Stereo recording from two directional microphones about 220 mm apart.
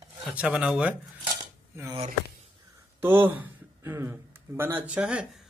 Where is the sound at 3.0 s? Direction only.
10° right (ahead or behind).